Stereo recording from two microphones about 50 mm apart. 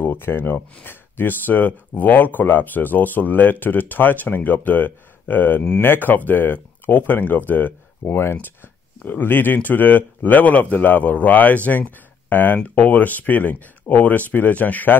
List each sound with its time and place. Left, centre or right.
0.0 s speech: left
8.0 s speech: left